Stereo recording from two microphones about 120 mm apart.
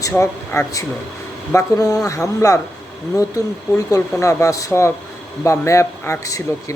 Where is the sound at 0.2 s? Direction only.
25° left (ahead or behind).